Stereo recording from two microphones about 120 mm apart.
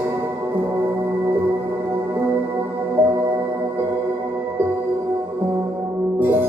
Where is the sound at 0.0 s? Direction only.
15° right (ahead or behind).